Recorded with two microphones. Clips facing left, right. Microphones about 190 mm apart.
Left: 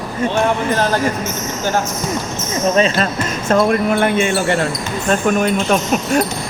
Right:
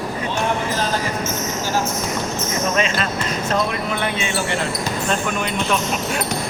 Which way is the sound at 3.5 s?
50° left (ahead or behind).